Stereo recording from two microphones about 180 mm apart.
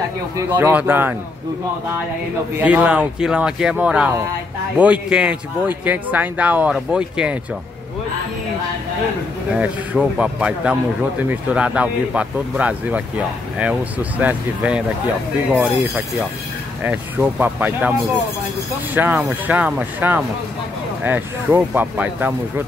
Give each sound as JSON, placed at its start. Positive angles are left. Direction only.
{"t": 0.4, "sound": "speech", "side_deg": -10}
{"t": 2.5, "sound": "speech", "side_deg": -10}
{"t": 9.6, "sound": "speech", "side_deg": -5}
{"t": 16.8, "sound": "speech", "side_deg": -10}
{"t": 18.9, "sound": "speech", "side_deg": -10}